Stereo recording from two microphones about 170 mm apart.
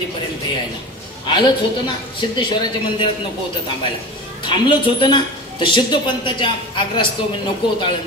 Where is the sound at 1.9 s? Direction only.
30° left (ahead or behind).